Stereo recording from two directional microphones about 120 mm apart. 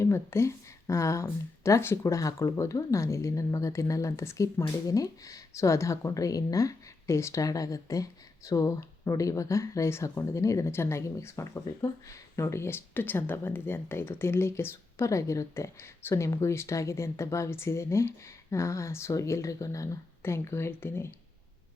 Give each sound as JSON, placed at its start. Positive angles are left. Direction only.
{"t": 0.0, "sound": "speech", "side_deg": 20}